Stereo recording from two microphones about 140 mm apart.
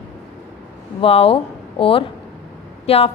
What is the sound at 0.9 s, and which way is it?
A woman's voice, 40° left (ahead or behind).